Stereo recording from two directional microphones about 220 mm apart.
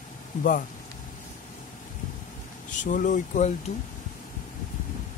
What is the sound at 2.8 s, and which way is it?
Speech, 35° left (ahead or behind).